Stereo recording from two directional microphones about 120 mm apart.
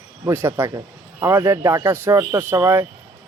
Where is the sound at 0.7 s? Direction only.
25° right (ahead or behind).